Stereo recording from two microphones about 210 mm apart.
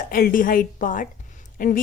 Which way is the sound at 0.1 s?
40° left (ahead or behind).